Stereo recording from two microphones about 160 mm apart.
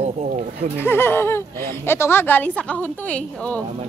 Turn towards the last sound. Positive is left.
turn(degrees=10)  # may be behind; listen again after turning